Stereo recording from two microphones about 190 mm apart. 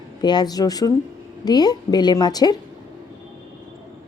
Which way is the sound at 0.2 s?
20° left (ahead or behind).